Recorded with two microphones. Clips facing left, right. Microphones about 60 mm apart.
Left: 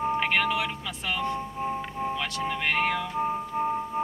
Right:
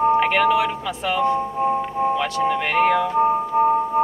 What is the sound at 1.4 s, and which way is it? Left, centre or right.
Music, centre.